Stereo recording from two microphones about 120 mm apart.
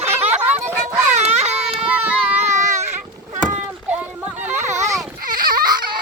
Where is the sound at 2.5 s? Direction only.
25° right (ahead or behind).